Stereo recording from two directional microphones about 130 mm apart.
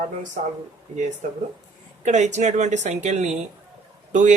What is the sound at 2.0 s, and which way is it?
Speech, 65° right (ahead or behind).